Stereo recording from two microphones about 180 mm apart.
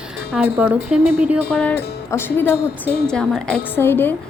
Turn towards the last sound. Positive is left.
turn(degrees=10)  # may be behind; listen again after turning